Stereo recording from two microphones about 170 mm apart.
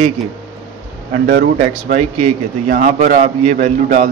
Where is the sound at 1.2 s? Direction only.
70° right (ahead or behind).